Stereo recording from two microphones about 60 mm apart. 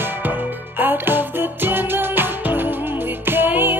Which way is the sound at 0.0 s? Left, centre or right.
Right.